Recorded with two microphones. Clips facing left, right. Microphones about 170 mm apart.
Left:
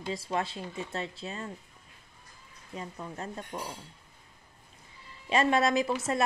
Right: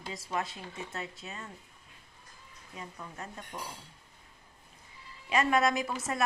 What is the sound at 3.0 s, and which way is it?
Speech, 30° left (ahead or behind).